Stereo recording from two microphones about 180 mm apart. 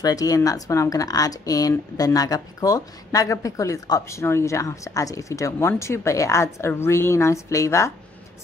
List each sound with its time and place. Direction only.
0.0 s speech: 20° left (ahead or behind)